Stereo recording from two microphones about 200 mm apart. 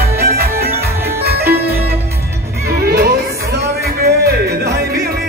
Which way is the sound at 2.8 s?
50° right (ahead or behind).